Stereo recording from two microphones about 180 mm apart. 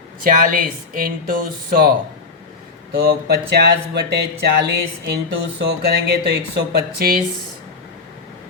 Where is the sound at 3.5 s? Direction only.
65° right (ahead or behind).